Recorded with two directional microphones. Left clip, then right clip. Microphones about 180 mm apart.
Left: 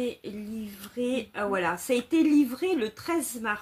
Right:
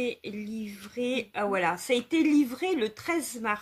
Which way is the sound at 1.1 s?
40° right (ahead or behind).